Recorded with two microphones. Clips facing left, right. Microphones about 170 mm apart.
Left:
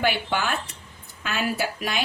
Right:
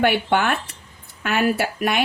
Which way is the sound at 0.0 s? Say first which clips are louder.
Right 6 dB; 60° right (ahead or behind).